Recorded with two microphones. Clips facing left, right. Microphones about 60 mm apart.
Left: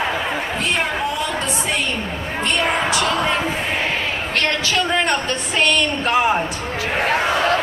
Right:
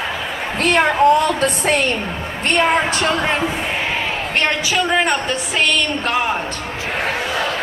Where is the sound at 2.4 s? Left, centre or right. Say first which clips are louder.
Right 4 dB; right.